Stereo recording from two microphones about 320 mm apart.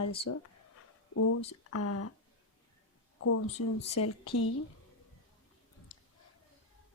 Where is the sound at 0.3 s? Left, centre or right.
Left.